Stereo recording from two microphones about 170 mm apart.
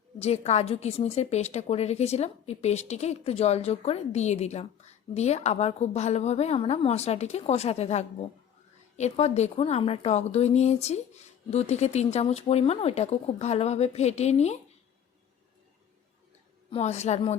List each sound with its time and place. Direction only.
0.2 s a woman's voice: 40° left (ahead or behind)
16.7 s a woman's voice: 40° left (ahead or behind)